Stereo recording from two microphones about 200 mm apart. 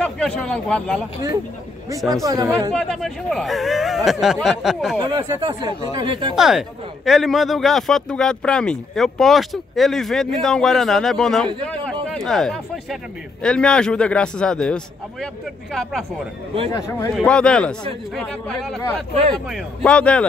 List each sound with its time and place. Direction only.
0.0 s speech: 5° left (ahead or behind)
5.0 s speech: 20° right (ahead or behind)
6.3 s speech: centre (ahead or behind)
11.6 s a sound: 5° left (ahead or behind)
13.4 s speech: 5° left (ahead or behind)
16.7 s a man's voice: 15° left (ahead or behind)
17.1 s speech: 5° left (ahead or behind)